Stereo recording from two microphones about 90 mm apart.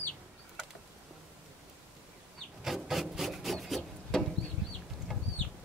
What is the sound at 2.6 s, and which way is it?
Rub, centre (ahead or behind).